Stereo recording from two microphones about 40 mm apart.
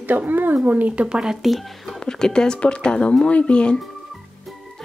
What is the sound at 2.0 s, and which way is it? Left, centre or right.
Speech, centre.